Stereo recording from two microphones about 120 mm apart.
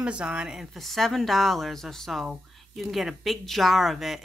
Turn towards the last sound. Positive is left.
turn(degrees=0)  # may be behind; listen again after turning